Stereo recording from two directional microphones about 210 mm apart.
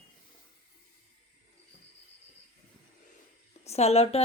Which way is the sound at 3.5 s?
30° left (ahead or behind).